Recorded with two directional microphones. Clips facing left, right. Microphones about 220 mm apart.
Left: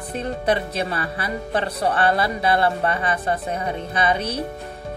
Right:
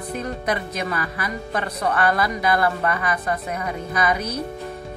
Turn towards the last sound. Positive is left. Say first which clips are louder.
# left 1 dB
turn(degrees=30)  # may be behind; listen again after turning